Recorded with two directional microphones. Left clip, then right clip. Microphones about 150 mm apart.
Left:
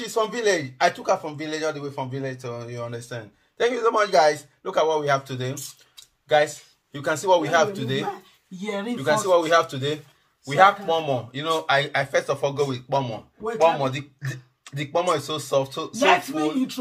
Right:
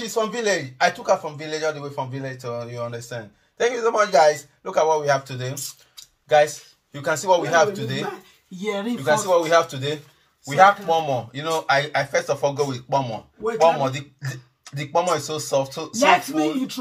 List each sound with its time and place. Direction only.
0.0 s a man's voice: 25° left (ahead or behind)
8.5 s speech: centre (ahead or behind)
9.0 s a man's voice: 25° left (ahead or behind)
14.6 s a man's voice: 20° left (ahead or behind)
16.0 s speech: centre (ahead or behind)